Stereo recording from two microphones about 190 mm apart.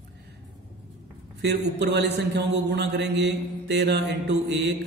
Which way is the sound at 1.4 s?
65° right (ahead or behind).